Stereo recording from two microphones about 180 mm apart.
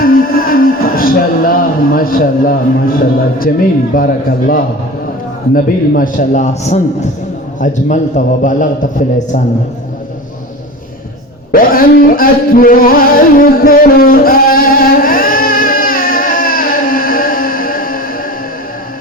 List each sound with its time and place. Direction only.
0.0 s music: 55° left (ahead or behind)
3.9 s a man's voice: 50° left (ahead or behind)
11.5 s a sound: 50° left (ahead or behind)